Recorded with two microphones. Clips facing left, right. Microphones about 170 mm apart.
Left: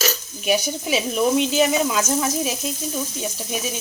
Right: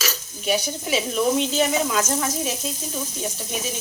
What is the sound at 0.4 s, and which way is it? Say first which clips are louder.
Speech: left 2 dB; 10° left (ahead or behind).